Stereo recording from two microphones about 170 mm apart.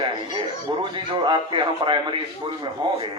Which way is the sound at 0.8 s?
30° right (ahead or behind).